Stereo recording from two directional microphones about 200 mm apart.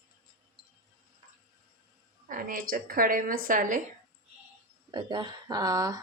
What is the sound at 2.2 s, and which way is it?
A woman's voice, 40° right (ahead or behind).